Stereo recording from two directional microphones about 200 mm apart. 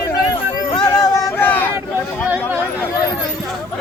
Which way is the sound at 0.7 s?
20° left (ahead or behind).